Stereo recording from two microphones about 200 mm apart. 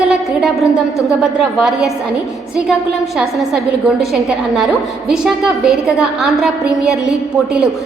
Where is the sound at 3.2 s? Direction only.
Centre (ahead or behind).